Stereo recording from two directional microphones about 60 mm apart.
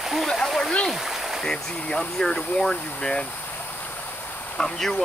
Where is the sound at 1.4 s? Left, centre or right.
Centre.